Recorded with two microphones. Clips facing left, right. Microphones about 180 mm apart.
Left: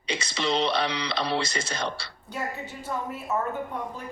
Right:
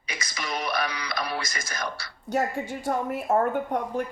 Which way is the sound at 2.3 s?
45° right (ahead or behind).